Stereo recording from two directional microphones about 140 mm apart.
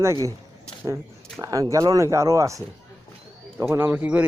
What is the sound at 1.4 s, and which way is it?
Speech, 25° right (ahead or behind).